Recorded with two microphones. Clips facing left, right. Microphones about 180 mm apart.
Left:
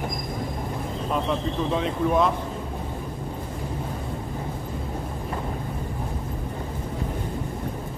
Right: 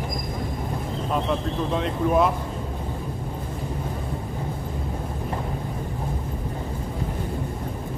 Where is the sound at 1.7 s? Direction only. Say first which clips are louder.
Right 1 dB; centre (ahead or behind).